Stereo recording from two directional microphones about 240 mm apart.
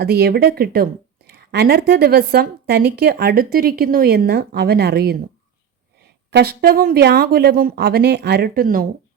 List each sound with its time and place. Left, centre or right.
0.0 s a woman's voice: right
6.3 s a woman's voice: right